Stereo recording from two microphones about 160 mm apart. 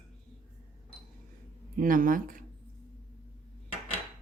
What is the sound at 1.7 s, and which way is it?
Speech, 60° right (ahead or behind).